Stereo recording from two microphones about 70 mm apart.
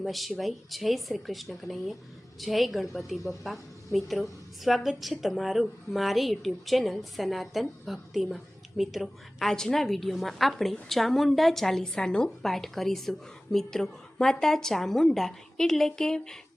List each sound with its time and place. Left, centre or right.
0.0 s a woman's voice: centre